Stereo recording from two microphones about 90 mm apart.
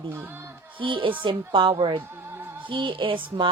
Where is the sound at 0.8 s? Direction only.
70° right (ahead or behind).